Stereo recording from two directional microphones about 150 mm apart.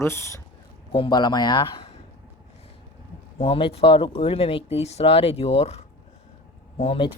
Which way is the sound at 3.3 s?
35° left (ahead or behind).